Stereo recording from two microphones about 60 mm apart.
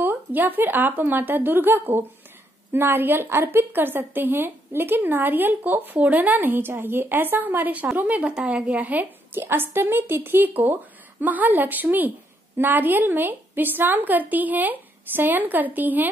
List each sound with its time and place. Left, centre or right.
0.0 s a woman's voice: right